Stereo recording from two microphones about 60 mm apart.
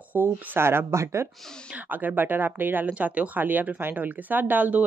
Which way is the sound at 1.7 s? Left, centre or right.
Right.